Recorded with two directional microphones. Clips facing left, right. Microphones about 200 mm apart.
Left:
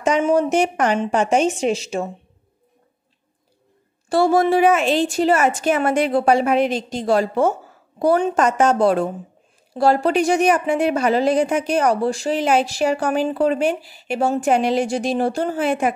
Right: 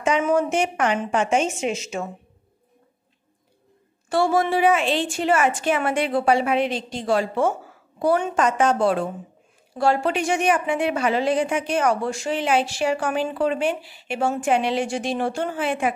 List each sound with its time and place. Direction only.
0.0 s a woman's voice: 35° left (ahead or behind)
4.1 s a woman's voice: 40° left (ahead or behind)